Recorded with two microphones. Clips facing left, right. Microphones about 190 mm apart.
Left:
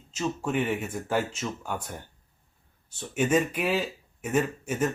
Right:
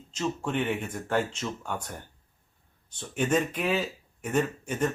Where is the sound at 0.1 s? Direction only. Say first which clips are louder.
Left 1 dB; 5° left (ahead or behind).